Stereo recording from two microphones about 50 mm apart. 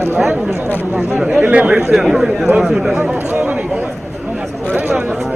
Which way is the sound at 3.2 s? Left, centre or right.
Right.